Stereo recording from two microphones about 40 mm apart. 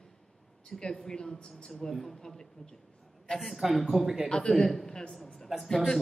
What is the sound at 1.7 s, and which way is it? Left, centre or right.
A woman's voice, centre.